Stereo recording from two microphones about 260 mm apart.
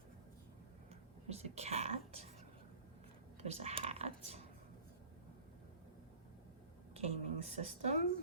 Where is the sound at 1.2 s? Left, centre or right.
Right.